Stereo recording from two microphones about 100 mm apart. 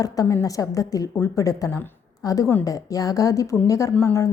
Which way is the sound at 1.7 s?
20° left (ahead or behind).